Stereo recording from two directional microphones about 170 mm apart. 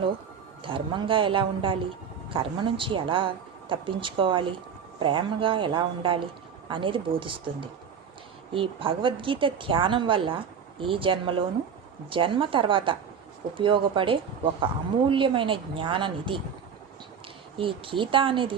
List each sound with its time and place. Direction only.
0.6 s speech: 30° right (ahead or behind)
17.6 s speech: 30° right (ahead or behind)